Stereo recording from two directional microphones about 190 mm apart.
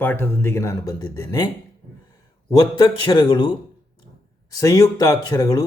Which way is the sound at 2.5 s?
20° left (ahead or behind).